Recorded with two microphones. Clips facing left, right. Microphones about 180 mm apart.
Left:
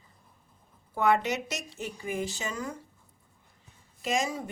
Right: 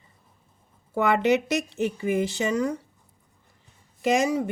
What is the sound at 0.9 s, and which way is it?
Speech, 65° right (ahead or behind).